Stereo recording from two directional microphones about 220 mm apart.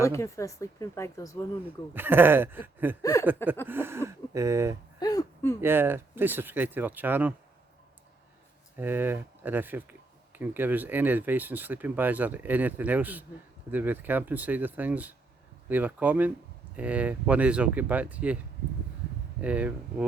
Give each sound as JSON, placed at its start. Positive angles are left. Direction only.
{"t": 0.0, "sound": "speech", "side_deg": 10}
{"t": 1.9, "sound": "speech", "side_deg": -10}
{"t": 3.0, "sound": "speech", "side_deg": 15}
{"t": 3.7, "sound": "speech", "side_deg": -10}
{"t": 4.9, "sound": "a sound", "side_deg": 15}
{"t": 5.5, "sound": "speech", "side_deg": -10}
{"t": 8.8, "sound": "speech", "side_deg": -10}
{"t": 19.4, "sound": "speech", "side_deg": -5}